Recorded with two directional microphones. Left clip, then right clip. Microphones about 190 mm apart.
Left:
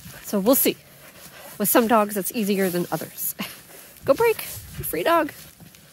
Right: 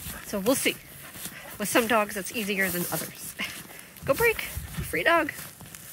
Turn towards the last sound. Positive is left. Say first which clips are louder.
# left 3 dB
turn(degrees=25)  # may be behind; listen again after turning